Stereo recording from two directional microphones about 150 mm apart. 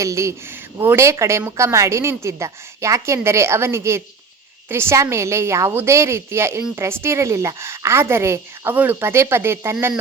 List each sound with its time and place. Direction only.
0.0 s a woman's voice: 20° right (ahead or behind)